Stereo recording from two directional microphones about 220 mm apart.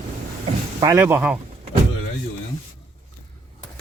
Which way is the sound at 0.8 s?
10° right (ahead or behind).